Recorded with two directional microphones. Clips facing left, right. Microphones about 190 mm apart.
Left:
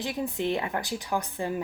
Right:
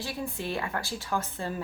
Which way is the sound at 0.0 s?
20° left (ahead or behind).